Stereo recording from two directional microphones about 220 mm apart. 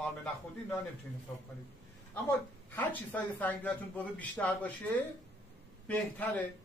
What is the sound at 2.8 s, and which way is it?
Speech, 10° left (ahead or behind).